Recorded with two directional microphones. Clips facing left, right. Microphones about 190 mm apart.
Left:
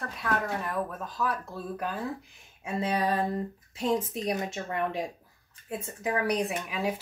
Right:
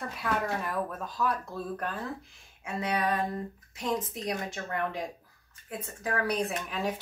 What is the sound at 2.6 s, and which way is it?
A woman's voice, 30° left (ahead or behind).